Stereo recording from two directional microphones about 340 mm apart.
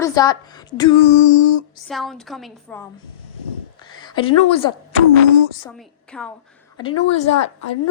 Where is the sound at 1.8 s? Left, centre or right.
Centre.